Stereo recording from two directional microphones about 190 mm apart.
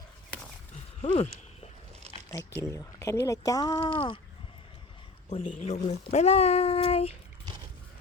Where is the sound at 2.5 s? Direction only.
15° left (ahead or behind).